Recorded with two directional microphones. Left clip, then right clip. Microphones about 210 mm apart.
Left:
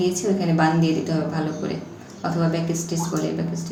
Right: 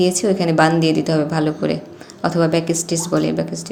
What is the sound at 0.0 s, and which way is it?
A woman's voice, 50° right (ahead or behind).